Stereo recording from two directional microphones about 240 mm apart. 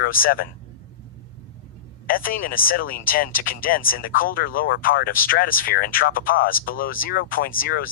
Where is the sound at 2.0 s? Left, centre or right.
Left.